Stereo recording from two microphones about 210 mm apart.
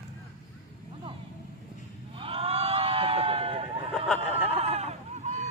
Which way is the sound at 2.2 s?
25° right (ahead or behind).